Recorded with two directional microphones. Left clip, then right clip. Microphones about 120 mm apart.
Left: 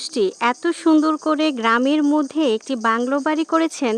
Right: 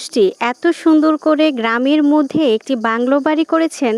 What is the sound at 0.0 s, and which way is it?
Speech, 35° right (ahead or behind).